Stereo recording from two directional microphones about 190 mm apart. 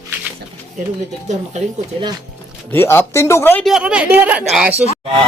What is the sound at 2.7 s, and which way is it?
Speech, 10° left (ahead or behind).